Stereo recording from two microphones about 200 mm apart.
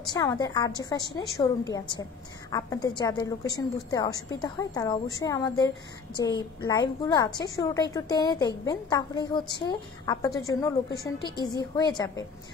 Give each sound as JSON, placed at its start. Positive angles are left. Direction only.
{"t": 0.0, "sound": "a woman's voice", "side_deg": 20}